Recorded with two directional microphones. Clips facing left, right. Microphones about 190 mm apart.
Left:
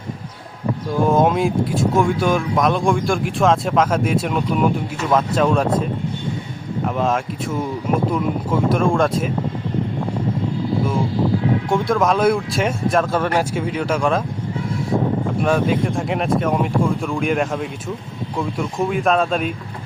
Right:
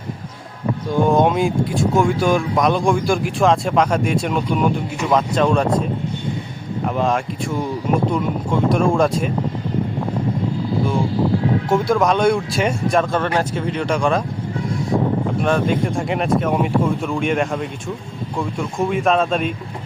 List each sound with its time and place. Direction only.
1.0 s speech: centre (ahead or behind)
11.7 s speech: centre (ahead or behind)
15.4 s speech: 5° left (ahead or behind)